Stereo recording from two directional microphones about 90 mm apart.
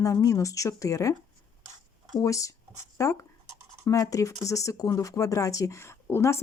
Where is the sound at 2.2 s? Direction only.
35° left (ahead or behind).